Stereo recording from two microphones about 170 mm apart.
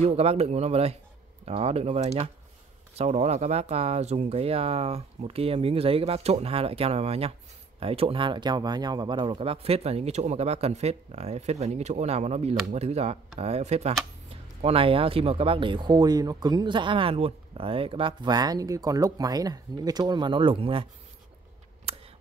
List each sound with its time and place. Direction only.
0.0 s speech: 40° right (ahead or behind)